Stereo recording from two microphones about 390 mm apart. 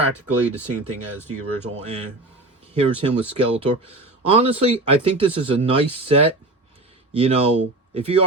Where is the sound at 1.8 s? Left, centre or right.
Centre.